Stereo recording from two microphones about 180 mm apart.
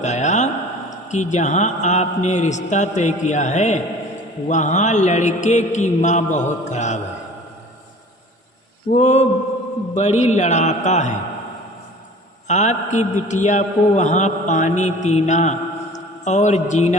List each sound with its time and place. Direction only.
0.0 s a man's voice: 40° left (ahead or behind)
8.9 s a man's voice: 40° left (ahead or behind)
12.5 s a man's voice: 40° left (ahead or behind)